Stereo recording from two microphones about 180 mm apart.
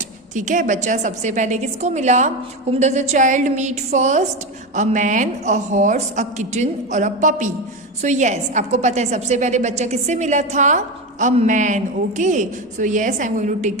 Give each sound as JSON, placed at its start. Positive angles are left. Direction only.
{"t": 0.3, "sound": "a woman's voice", "side_deg": -45}